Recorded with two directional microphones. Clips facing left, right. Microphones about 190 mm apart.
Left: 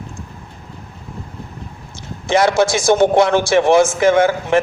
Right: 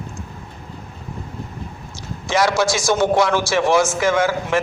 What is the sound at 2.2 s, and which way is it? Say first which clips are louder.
A man's voice: left 4 dB; 55° left (ahead or behind).